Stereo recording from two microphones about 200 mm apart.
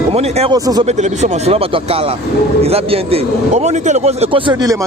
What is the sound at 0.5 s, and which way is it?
Speech, 20° right (ahead or behind).